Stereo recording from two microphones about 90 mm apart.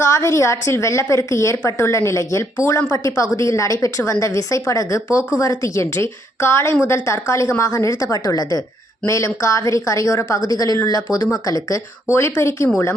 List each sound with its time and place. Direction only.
0.0 s speech: 35° left (ahead or behind)